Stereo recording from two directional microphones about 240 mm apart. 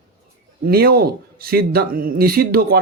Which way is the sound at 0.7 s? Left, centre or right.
Right.